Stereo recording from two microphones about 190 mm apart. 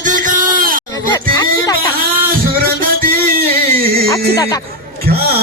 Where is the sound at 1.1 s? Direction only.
20° left (ahead or behind).